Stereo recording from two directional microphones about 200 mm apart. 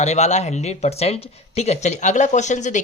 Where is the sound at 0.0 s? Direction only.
35° left (ahead or behind).